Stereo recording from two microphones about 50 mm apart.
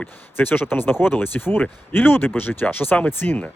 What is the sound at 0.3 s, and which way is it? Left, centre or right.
Speech, left.